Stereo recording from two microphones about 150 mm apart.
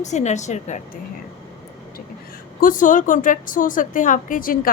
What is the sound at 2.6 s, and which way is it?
A woman's voice, 65° left (ahead or behind).